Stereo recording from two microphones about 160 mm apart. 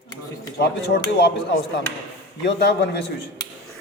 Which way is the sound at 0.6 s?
90° left.